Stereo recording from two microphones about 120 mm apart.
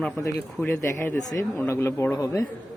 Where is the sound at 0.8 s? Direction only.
20° left (ahead or behind).